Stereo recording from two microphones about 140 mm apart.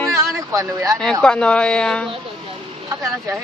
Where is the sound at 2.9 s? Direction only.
25° right (ahead or behind).